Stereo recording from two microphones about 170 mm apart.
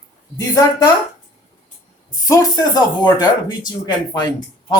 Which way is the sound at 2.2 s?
20° left (ahead or behind).